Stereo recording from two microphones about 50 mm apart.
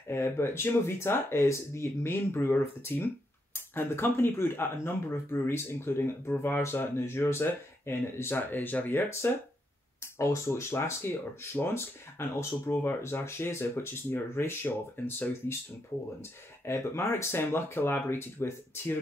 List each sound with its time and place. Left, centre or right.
0.1 s speech: left
10.1 s speech: left
16.2 s speech: left